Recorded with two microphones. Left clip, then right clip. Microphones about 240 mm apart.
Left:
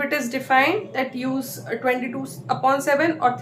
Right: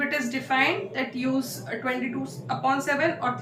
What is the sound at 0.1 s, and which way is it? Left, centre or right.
A woman's voice, centre.